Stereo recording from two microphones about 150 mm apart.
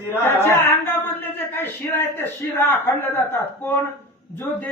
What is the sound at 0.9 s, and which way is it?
A man's voice, 15° left (ahead or behind).